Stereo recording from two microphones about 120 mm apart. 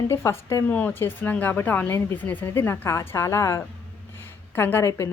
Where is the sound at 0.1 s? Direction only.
20° left (ahead or behind).